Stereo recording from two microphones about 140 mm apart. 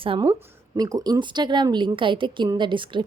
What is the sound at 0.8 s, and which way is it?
A woman's voice, 25° right (ahead or behind).